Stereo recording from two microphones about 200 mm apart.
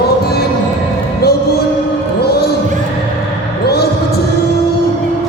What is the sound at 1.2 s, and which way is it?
Music, 50° left (ahead or behind).